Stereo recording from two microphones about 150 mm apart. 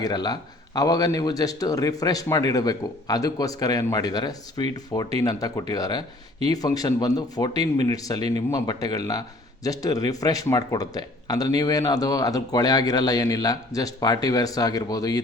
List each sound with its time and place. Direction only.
0.0 s speech: 25° left (ahead or behind)